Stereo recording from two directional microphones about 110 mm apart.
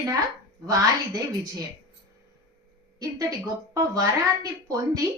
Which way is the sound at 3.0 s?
35° right (ahead or behind).